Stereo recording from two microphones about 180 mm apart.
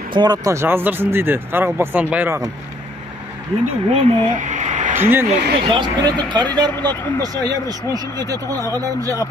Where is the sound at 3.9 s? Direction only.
40° right (ahead or behind).